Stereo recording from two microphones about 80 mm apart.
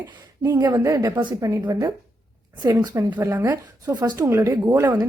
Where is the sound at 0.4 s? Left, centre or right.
Right.